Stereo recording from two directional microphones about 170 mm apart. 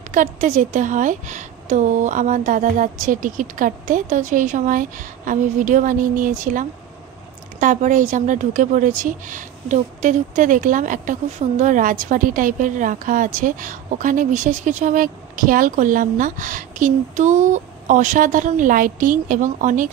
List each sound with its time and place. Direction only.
0.1 s a woman's voice: 50° right (ahead or behind)